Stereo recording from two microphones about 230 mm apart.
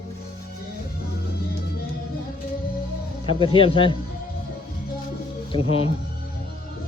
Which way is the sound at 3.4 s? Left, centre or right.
Left.